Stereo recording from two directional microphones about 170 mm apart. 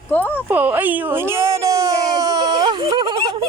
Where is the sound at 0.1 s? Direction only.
10° left (ahead or behind).